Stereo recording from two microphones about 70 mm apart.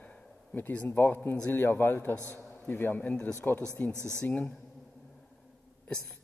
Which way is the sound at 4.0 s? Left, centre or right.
Right.